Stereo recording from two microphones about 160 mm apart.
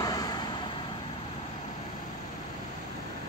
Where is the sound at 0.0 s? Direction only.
25° left (ahead or behind).